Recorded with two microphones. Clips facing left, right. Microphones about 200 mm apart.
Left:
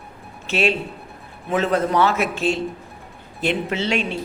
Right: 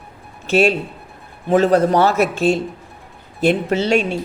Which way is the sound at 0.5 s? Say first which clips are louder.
Right 6 dB; 45° right (ahead or behind).